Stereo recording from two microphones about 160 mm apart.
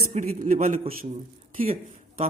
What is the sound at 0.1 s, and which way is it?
A man's voice, 55° right (ahead or behind).